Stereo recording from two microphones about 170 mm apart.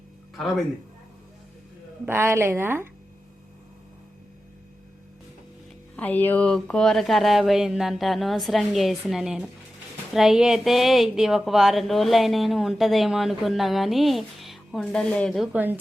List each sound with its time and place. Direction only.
0.3 s speech: centre (ahead or behind)
2.0 s speech: 15° right (ahead or behind)
6.0 s speech: 10° left (ahead or behind)
15.5 s speech: 10° right (ahead or behind)